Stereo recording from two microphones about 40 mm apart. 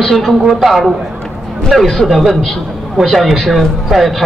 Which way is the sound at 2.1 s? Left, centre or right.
Centre.